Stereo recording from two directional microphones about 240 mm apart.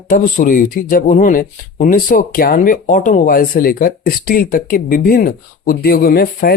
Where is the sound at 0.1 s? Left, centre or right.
Left.